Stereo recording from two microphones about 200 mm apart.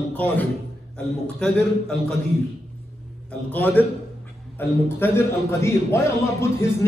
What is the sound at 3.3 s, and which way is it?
Speech, 10° left (ahead or behind).